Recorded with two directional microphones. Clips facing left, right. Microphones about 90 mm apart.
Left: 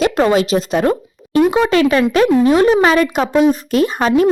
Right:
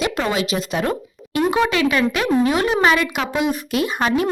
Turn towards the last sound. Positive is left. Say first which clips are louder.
# left 6 dB
turn(degrees=35)  # may be behind; listen again after turning